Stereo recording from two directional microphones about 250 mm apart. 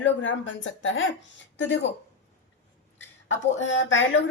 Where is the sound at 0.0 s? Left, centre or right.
Left.